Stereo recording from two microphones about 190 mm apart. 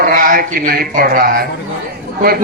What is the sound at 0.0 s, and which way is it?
Speech, 45° right (ahead or behind).